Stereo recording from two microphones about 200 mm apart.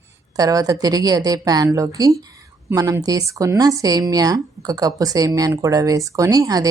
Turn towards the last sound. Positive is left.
turn(degrees=-20)  # may be behind; listen again after turning